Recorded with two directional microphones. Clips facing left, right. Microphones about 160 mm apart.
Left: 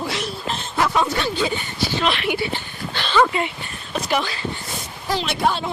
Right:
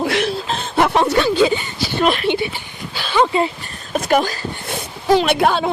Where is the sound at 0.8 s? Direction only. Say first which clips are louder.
Right 5 dB; 60° right (ahead or behind).